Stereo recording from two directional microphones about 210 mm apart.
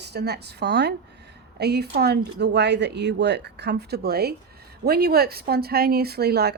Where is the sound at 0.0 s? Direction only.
50° right (ahead or behind).